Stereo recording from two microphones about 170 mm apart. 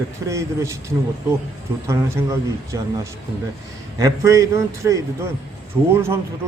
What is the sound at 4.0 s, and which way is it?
A man's voice, 20° right (ahead or behind).